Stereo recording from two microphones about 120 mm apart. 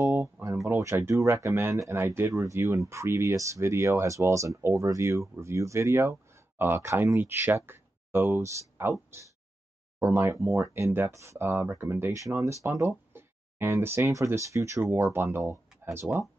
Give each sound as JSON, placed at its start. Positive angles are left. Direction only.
{"t": 0.0, "sound": "a sound", "side_deg": -20}
{"t": 0.7, "sound": "speech", "side_deg": -25}
{"t": 9.9, "sound": "speech", "side_deg": -20}